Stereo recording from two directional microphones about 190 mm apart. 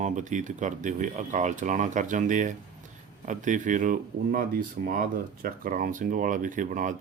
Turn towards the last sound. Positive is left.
turn(degrees=-45)  # may be behind; listen again after turning